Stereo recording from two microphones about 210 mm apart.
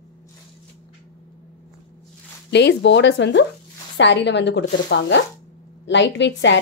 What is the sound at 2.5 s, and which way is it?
A woman's voice, 55° left (ahead or behind).